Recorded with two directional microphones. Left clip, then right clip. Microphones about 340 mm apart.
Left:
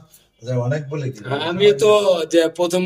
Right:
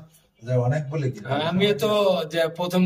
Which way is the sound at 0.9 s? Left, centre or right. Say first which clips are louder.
Left 2 dB; centre.